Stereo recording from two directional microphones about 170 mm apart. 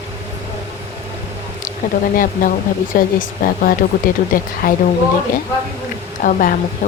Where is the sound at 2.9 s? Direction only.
60° left (ahead or behind).